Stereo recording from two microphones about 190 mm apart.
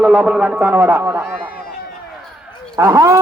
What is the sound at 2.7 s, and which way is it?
Speech, 20° right (ahead or behind).